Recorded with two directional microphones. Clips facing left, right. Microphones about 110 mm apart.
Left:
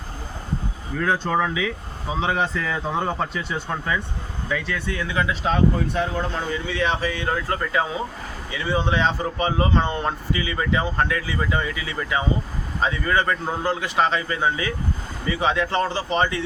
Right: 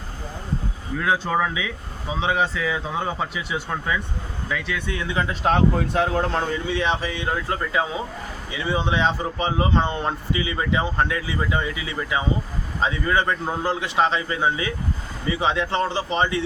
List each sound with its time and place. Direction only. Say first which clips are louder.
1.0 s a man's voice: even; 5° right (ahead or behind)
5.2 s speech: left 1 dB; 45° right (ahead or behind)
5.5 s speech: right 3 dB; 80° right
6.7 s speech: even; 25° right (ahead or behind)
13.4 s a man's voice: even; 5° right (ahead or behind)
13.7 s speech: even; 20° right (ahead or behind)